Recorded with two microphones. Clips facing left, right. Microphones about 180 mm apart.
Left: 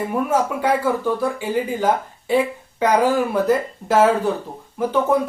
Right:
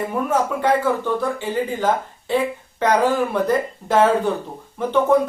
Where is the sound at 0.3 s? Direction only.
10° left (ahead or behind).